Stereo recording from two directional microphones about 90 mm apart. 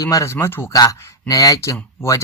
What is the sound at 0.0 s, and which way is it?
Speech, 40° left (ahead or behind).